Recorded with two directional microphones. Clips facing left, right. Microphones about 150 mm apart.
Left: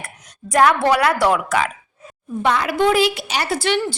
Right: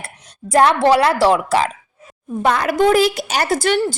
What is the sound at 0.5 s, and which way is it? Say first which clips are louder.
A woman's voice: right 3 dB; 30° right (ahead or behind).